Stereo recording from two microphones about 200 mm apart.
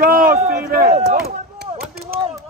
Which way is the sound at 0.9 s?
30° right (ahead or behind).